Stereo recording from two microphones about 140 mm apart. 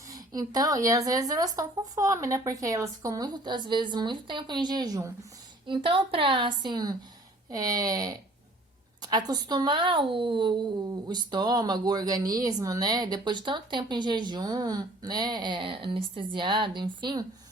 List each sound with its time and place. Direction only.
0.1 s speech: 30° right (ahead or behind)
5.6 s speech: 35° right (ahead or behind)